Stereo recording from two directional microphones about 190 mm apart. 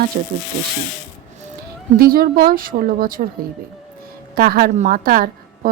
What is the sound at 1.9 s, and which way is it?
A woman's voice, 50° right (ahead or behind).